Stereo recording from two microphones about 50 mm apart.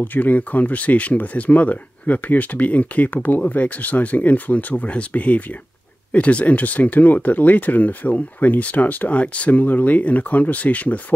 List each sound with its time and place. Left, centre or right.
0.0 s speech: left